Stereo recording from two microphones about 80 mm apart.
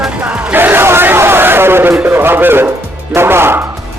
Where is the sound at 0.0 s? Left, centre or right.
Centre.